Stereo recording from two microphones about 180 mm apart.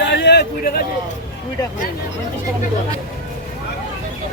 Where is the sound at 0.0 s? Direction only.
70° left (ahead or behind).